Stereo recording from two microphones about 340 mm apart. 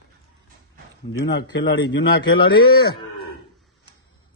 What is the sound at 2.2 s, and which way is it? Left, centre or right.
Speech, centre.